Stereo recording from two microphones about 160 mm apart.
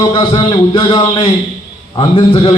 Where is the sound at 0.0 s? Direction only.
30° left (ahead or behind).